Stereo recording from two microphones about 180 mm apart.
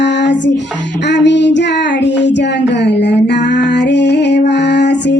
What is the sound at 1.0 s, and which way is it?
Child singing, 75° left (ahead or behind).